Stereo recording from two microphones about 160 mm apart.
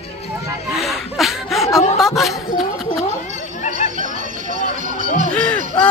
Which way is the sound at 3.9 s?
55° right (ahead or behind).